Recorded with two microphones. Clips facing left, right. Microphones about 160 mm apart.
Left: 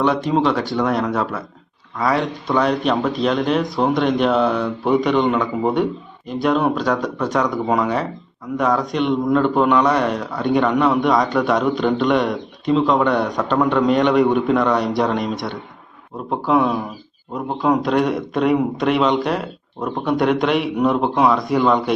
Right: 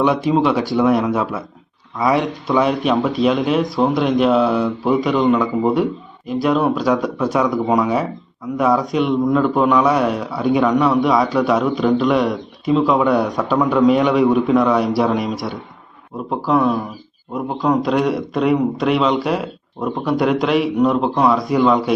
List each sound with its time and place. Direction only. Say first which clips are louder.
0.0 s speech: right 2 dB; 10° right (ahead or behind)